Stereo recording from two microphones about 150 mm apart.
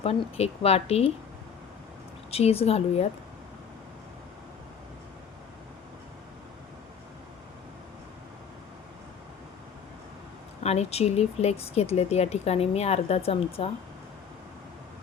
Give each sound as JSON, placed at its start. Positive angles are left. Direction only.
{"t": 0.0, "sound": "speech", "side_deg": 40}
{"t": 2.3, "sound": "speech", "side_deg": 40}
{"t": 10.6, "sound": "speech", "side_deg": 45}